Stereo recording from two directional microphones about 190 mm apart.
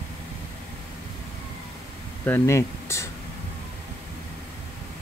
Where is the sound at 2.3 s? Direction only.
15° left (ahead or behind).